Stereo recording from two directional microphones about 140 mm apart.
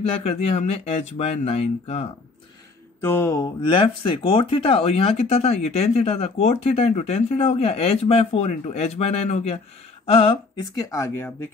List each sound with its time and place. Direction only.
0.0 s speech: 50° left (ahead or behind)
3.0 s mantra: 15° left (ahead or behind)
3.6 s speech: 35° left (ahead or behind); by 11.3 s 20° left (ahead or behind)